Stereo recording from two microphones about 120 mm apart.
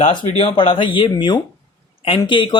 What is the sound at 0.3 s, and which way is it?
Speech, 50° left (ahead or behind).